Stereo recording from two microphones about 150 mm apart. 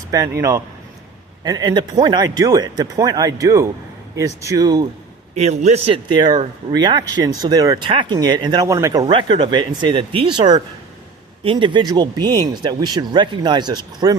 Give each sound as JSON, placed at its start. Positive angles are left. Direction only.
{"t": 0.1, "sound": "speech", "side_deg": -20}
{"t": 5.4, "sound": "a man's voice", "side_deg": -50}
{"t": 6.1, "sound": "speech", "side_deg": -30}
{"t": 11.5, "sound": "speech", "side_deg": -30}